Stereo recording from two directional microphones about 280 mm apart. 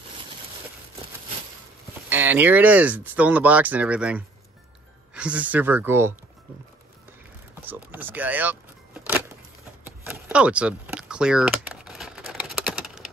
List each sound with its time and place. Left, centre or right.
2.0 s speech: centre
7.6 s speech: centre
9.8 s a sound: centre